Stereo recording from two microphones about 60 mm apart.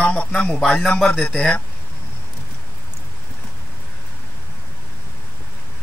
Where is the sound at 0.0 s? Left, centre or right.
Centre.